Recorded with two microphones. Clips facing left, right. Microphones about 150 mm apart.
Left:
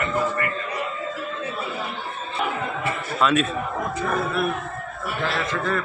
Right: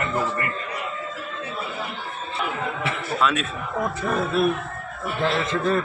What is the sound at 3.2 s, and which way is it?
Speech, centre (ahead or behind).